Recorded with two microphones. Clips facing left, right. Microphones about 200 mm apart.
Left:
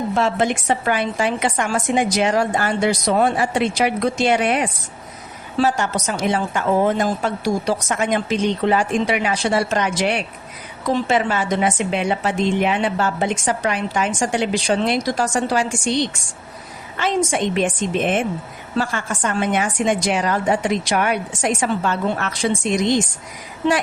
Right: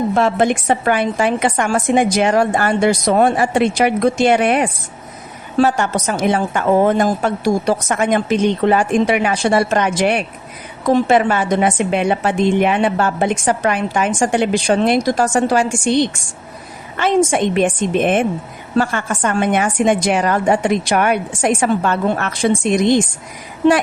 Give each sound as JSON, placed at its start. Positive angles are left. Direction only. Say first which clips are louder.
{"t": 0.1, "sound": "a woman's voice", "louder": "right 2 dB", "side_deg": -55}